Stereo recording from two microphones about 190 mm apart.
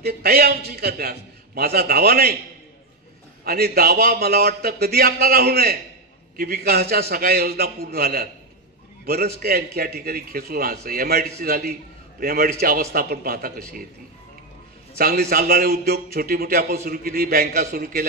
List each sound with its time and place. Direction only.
0.0 s a man's voice: 55° right (ahead or behind)
3.4 s a man's voice: 55° right (ahead or behind)
15.0 s a man's voice: 55° right (ahead or behind)